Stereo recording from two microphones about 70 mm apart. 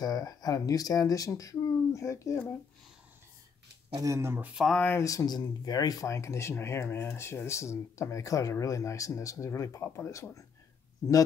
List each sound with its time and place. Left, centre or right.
0.0 s speech: left
4.0 s speech: right
4.6 s speech: centre
5.0 s speech: left
6.0 s speech: left